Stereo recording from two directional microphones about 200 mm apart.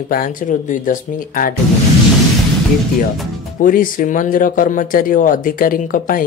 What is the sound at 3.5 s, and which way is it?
A man's voice, 45° left (ahead or behind).